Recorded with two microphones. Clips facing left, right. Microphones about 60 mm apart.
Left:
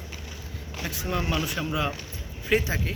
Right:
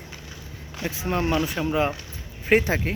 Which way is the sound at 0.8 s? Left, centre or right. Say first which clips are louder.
Right 4 dB; right.